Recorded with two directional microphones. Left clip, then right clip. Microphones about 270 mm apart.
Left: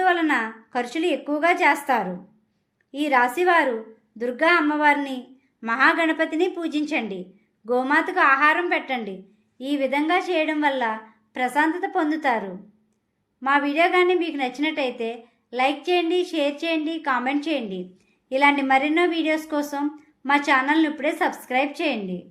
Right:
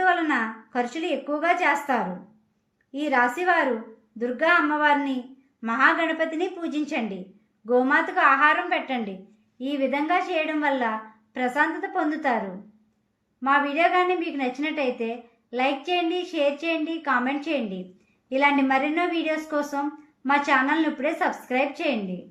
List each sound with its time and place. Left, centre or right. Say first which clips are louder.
0.0 s a woman's voice: left 2 dB; left
13.4 s a woman's voice: left 1 dB; left